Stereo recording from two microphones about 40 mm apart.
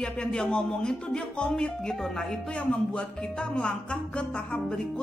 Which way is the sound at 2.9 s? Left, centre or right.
Left.